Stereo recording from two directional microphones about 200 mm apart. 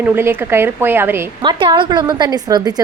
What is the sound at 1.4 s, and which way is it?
Speech, 25° right (ahead or behind).